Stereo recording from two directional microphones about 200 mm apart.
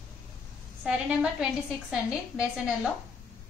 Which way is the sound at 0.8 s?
5° right (ahead or behind).